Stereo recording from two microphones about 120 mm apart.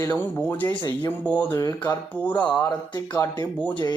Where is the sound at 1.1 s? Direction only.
15° left (ahead or behind).